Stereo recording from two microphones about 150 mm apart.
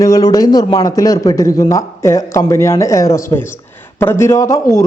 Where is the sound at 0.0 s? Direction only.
25° left (ahead or behind).